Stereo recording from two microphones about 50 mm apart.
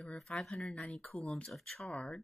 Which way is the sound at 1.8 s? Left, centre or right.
Left.